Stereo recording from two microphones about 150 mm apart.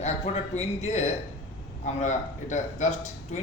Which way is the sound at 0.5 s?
45° left (ahead or behind).